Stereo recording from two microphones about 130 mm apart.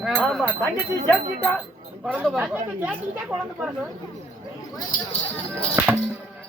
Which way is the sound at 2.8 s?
10° right (ahead or behind).